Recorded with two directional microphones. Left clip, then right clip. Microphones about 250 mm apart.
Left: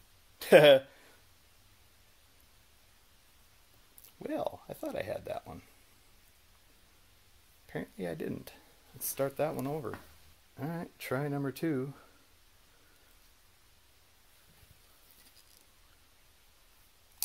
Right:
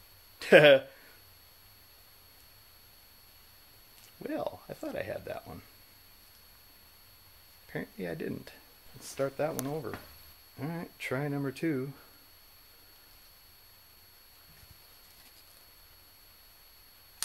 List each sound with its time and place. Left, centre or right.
0.4 s speech: centre
4.2 s speech: centre
7.7 s speech: centre
10.6 s speech: centre